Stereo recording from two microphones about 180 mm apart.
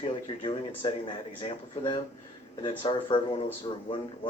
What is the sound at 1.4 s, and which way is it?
Speech, 30° left (ahead or behind).